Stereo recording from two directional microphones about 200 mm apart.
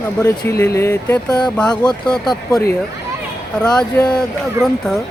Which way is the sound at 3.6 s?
5° left (ahead or behind).